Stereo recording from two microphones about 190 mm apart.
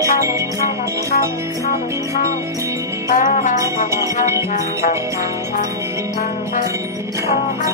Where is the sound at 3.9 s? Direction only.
15° right (ahead or behind).